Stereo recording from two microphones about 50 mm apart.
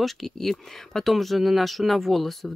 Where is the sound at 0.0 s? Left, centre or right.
Centre.